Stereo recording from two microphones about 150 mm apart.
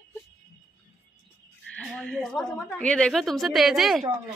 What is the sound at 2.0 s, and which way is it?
A woman's voice, 5° left (ahead or behind).